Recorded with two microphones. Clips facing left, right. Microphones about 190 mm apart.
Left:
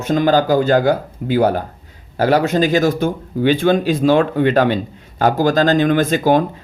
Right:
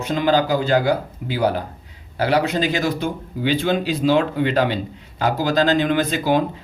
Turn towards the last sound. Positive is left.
turn(degrees=50)  # may be behind; listen again after turning